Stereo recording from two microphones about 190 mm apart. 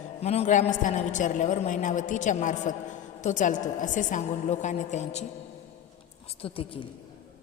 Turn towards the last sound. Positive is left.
turn(degrees=30)  # may be behind; listen again after turning